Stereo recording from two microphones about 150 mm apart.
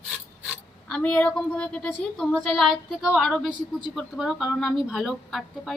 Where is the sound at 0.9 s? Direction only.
5° left (ahead or behind).